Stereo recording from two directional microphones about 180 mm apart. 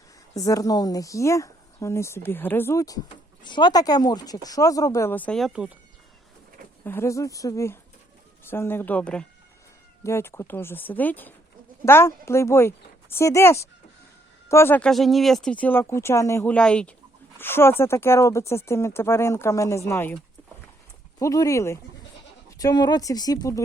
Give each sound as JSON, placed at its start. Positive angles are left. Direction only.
{"t": 0.3, "sound": "speech", "side_deg": 20}
{"t": 6.8, "sound": "speech", "side_deg": 15}
{"t": 21.2, "sound": "speech", "side_deg": 20}